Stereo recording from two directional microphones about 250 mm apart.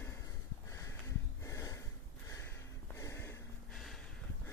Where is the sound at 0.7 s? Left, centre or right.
Centre.